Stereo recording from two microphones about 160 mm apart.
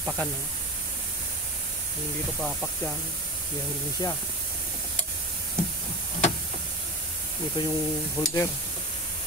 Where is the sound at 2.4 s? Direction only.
5° left (ahead or behind).